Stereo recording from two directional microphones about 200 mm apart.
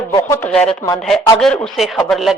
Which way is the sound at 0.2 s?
10° left (ahead or behind).